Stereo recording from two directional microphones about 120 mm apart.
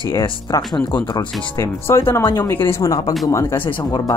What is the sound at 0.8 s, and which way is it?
Speech, 40° left (ahead or behind).